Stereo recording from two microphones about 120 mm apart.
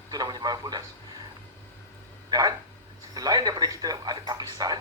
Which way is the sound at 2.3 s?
30° right (ahead or behind).